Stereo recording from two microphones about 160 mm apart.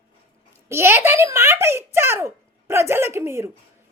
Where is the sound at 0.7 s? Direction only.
15° right (ahead or behind).